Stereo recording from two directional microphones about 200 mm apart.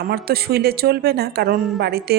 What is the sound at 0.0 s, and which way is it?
Speech, 50° right (ahead or behind).